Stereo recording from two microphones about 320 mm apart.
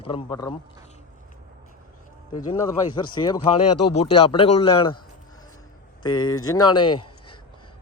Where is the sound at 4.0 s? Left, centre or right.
Centre.